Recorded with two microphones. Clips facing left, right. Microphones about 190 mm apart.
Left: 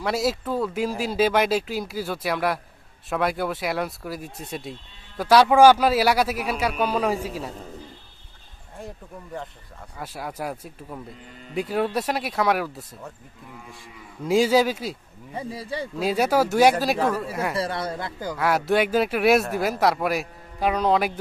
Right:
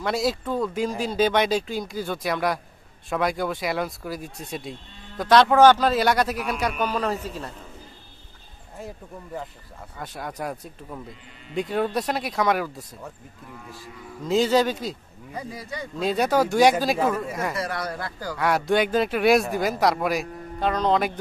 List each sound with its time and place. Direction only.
0.0 s speech: 5° left (ahead or behind)
8.7 s speech: centre (ahead or behind)
14.2 s speech: 10° left (ahead or behind)
15.3 s speech: 30° left (ahead or behind)
16.0 s speech: 5° left (ahead or behind)
17.6 s speech: 25° left (ahead or behind)
18.3 s speech: centre (ahead or behind)